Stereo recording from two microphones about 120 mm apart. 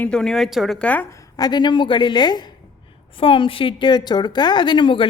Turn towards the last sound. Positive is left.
turn(degrees=40)  # may be behind; listen again after turning